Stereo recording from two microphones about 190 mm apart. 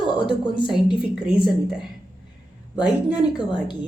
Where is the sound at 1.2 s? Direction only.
Centre (ahead or behind).